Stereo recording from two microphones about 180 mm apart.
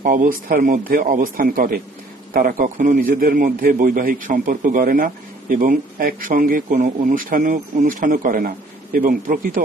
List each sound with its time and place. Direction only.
0.0 s a man's voice: 50° right (ahead or behind)